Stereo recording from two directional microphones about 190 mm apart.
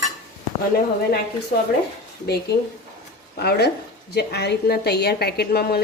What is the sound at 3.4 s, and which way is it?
A woman's voice, 60° left (ahead or behind).